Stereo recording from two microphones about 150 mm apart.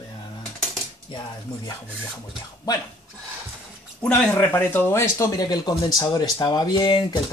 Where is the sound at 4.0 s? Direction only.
10° left (ahead or behind).